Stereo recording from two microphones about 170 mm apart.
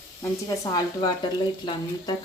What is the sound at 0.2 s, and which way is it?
Speech, 20° left (ahead or behind).